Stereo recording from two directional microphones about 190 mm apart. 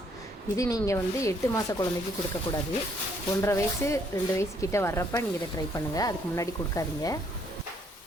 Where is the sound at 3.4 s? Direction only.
15° left (ahead or behind).